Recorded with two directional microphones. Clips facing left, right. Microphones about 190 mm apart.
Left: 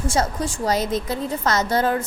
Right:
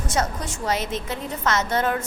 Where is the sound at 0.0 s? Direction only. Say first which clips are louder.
Left 3 dB; 30° left (ahead or behind).